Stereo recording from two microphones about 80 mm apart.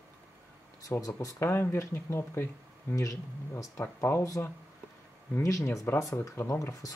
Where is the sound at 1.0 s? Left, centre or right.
Left.